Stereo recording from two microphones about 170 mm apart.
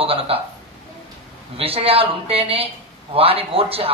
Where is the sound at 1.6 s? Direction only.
35° right (ahead or behind).